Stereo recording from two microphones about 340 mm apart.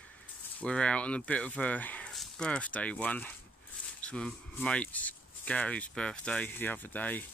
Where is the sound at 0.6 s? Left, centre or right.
Centre.